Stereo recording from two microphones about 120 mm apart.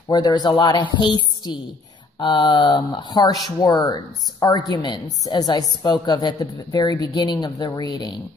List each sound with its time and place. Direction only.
0.1 s speech: 35° left (ahead or behind)